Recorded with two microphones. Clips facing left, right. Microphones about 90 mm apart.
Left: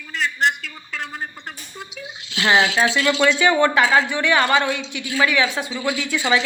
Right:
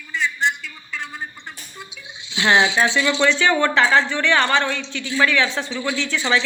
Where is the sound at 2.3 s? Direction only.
Centre (ahead or behind).